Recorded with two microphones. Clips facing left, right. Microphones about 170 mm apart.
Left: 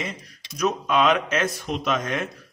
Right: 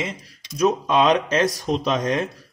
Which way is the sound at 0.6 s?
35° right (ahead or behind).